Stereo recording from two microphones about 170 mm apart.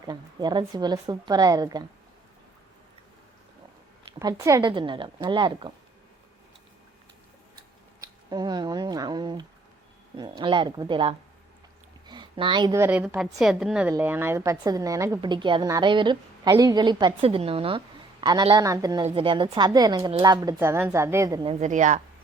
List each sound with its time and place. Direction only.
0.0 s a woman's voice: 25° right (ahead or behind)
4.2 s a woman's voice: 20° right (ahead or behind)
8.0 s a woman's voice: 25° right (ahead or behind)
19.0 s a woman's voice: 30° right (ahead or behind)
21.4 s speech: 40° right (ahead or behind)